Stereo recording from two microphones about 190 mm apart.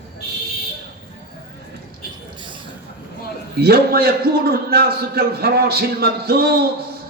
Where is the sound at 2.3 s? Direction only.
25° right (ahead or behind).